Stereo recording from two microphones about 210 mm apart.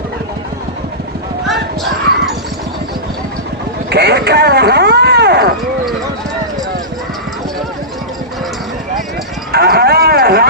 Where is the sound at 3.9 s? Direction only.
50° right (ahead or behind).